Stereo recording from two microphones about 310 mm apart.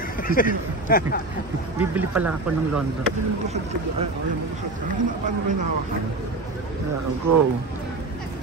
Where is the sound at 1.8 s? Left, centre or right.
Centre.